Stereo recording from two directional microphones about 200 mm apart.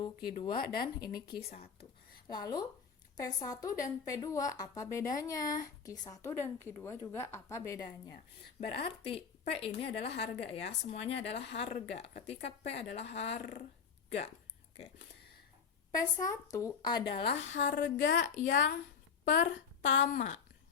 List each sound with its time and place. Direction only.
0.0 s speech: 25° left (ahead or behind)
2.2 s a woman's voice: 20° left (ahead or behind)
8.8 s a woman's voice: 25° left (ahead or behind)
15.9 s speech: 20° left (ahead or behind)
17.6 s a woman's voice: 40° left (ahead or behind)